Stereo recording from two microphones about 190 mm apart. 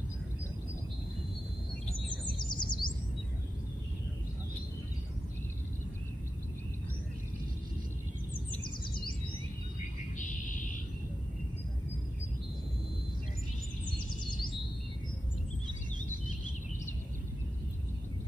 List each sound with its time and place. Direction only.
2.4 s bird: 25° left (ahead or behind)